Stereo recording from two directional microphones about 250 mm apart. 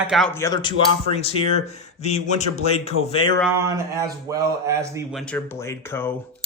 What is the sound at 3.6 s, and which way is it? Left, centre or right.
Speech, centre.